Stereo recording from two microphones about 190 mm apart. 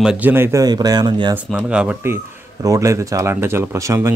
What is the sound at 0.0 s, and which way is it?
Speech, 5° right (ahead or behind).